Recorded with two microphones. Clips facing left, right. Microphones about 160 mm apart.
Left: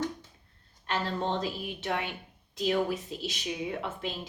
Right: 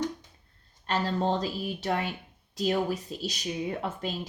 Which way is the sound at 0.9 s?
40° right (ahead or behind).